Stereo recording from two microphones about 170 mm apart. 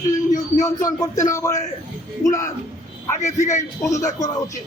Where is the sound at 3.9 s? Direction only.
20° left (ahead or behind).